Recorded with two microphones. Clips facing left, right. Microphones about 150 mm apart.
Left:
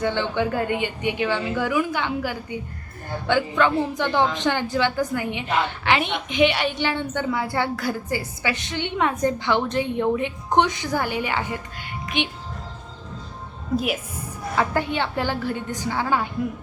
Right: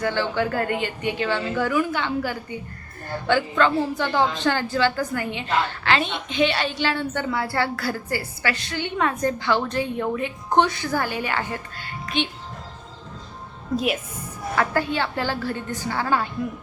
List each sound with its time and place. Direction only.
0.0 s a woman's voice: 20° left (ahead or behind)
3.6 s a woman's voice: 15° left (ahead or behind)
13.7 s a woman's voice: 5° left (ahead or behind)
14.5 s a woman's voice: 20° left (ahead or behind)